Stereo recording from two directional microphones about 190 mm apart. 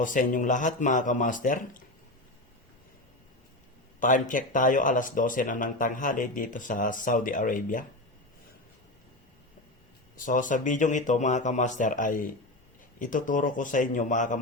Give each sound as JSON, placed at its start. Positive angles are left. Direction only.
{"t": 0.0, "sound": "speech", "side_deg": 45}
{"t": 4.0, "sound": "speech", "side_deg": 45}
{"t": 10.2, "sound": "speech", "side_deg": 45}